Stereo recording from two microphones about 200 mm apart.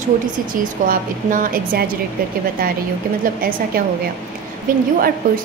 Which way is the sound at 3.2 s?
45° right (ahead or behind).